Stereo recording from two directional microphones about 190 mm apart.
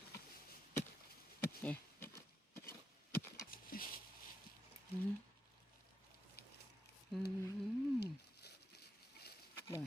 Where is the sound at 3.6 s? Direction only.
50° left (ahead or behind).